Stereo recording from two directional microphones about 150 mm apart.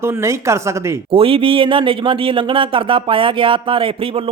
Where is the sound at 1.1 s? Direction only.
40° right (ahead or behind).